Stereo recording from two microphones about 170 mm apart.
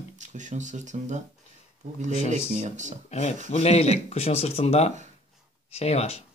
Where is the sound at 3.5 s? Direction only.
40° left (ahead or behind).